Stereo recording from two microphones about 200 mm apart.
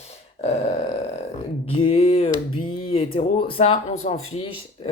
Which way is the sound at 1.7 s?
30° left (ahead or behind).